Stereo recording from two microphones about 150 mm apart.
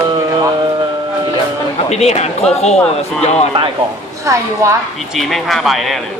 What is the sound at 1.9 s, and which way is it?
Speech, 45° left (ahead or behind).